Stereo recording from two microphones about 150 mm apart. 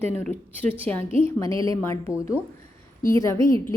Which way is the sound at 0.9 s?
15° left (ahead or behind).